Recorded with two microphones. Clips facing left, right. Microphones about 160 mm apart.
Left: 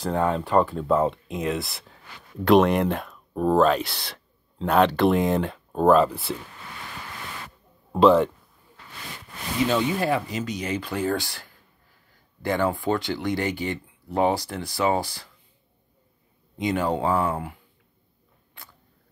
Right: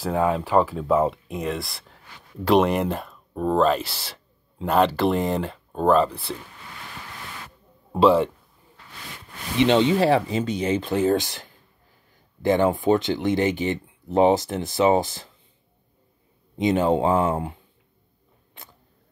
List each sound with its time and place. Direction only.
0.0 s speech: 5° right (ahead or behind)
7.9 s speech: 5° right (ahead or behind)
9.6 s speech: 25° right (ahead or behind)
16.5 s speech: 20° right (ahead or behind)
18.5 s camera: 20° right (ahead or behind)